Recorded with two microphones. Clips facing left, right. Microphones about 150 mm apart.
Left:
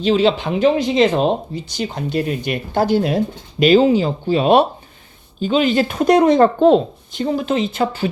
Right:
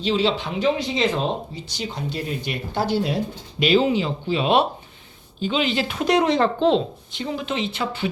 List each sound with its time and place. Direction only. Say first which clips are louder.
0.0 s speech: left 6 dB; 50° left (ahead or behind)